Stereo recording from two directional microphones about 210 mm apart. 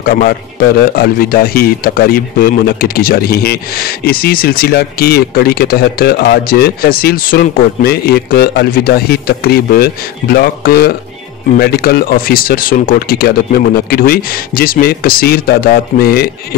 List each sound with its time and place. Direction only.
0.0 s speech: 45° left (ahead or behind)